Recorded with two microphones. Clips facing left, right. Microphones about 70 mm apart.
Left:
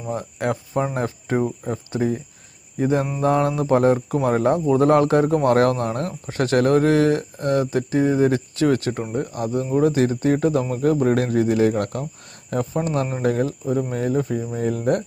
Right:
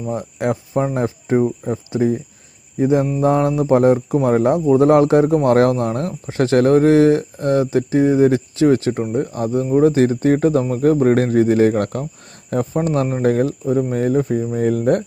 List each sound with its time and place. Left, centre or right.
0.1 s speech: right
3.2 s speech: right